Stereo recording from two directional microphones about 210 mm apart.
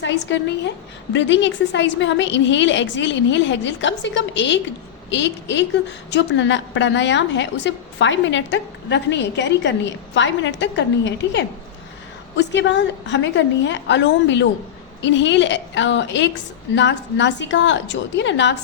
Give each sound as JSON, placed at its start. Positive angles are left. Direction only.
{"t": 0.0, "sound": "a woman's voice", "side_deg": 60}